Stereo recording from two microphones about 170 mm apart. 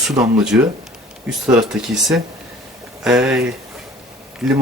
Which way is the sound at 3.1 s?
5° right (ahead or behind).